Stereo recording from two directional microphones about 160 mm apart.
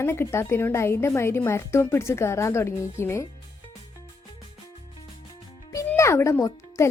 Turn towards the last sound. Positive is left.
turn(degrees=15)  # may be behind; listen again after turning